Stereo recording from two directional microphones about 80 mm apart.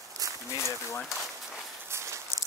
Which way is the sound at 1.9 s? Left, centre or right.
Right.